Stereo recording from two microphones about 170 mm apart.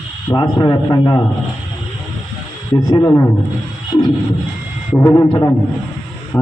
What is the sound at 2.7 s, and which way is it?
Speech, 20° left (ahead or behind).